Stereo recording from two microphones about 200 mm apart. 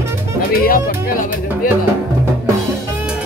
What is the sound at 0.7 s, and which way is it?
Music, 45° left (ahead or behind).